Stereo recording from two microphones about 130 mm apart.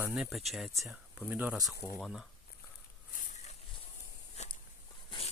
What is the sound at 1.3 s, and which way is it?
Speech, 15° right (ahead or behind).